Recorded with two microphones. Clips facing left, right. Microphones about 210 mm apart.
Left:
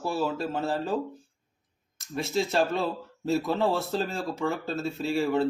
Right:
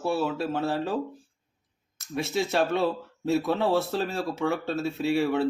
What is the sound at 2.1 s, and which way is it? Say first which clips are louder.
Speech: even; centre (ahead or behind).